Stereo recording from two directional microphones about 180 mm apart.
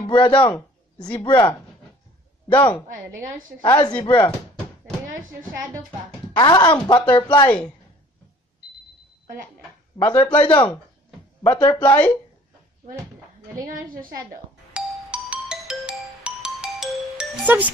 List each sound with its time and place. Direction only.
0.1 s a woman's voice: 25° left (ahead or behind)
3.1 s a woman's voice: 50° right (ahead or behind)
3.6 s a woman's voice: 25° left (ahead or behind)
6.3 s a woman's voice: 25° left (ahead or behind)
9.9 s a woman's voice: 20° left (ahead or behind)
14.3 s music: 5° right (ahead or behind)